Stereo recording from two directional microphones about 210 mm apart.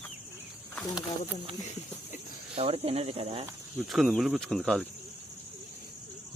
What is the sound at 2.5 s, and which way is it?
Speech, 30° right (ahead or behind).